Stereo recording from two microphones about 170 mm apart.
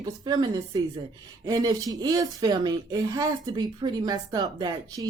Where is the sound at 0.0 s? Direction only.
25° right (ahead or behind).